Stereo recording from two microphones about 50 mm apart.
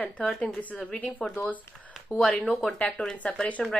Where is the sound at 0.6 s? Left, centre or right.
Left.